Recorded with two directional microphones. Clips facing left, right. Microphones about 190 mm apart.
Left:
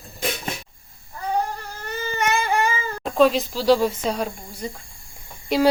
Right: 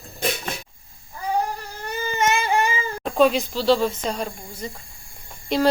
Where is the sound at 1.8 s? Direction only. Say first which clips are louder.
Right 2 dB; 20° right (ahead or behind).